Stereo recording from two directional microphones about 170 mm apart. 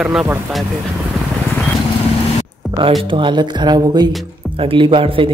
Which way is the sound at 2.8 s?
30° right (ahead or behind).